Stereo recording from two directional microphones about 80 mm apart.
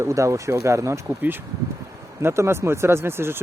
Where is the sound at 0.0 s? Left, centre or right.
Right.